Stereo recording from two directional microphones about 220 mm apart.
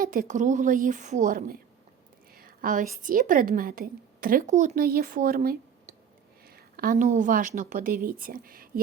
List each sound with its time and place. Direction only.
0.0 s a woman's voice: 40° right (ahead or behind)